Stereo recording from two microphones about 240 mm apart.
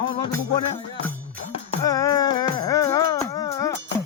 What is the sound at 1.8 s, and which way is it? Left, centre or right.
Music, centre.